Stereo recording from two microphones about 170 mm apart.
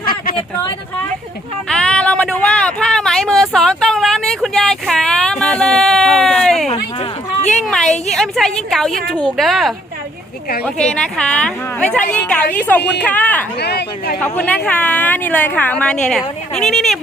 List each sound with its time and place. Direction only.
0.0 s a sound: 60° left (ahead or behind)
1.7 s a sound: 5° left (ahead or behind)
8.1 s a woman's voice: 5° left (ahead or behind)
10.8 s a woman's voice: 5° left (ahead or behind)
13.6 s speech: 75° left (ahead or behind)
14.2 s a woman's voice: 10° left (ahead or behind)